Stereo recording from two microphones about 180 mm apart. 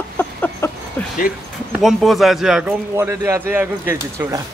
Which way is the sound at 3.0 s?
15° right (ahead or behind).